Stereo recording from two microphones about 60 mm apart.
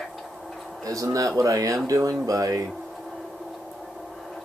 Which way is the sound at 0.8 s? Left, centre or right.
Right.